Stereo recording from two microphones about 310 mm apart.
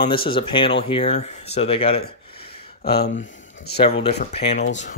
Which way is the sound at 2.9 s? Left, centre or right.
Left.